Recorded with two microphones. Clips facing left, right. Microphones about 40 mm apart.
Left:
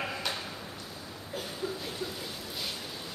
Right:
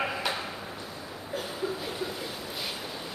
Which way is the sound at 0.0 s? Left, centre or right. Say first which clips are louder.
Right 4 dB; centre.